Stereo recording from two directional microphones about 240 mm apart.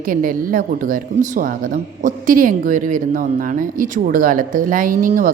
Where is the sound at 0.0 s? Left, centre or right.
Right.